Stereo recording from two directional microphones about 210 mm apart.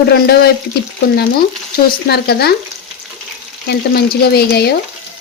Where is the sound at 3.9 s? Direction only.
50° left (ahead or behind).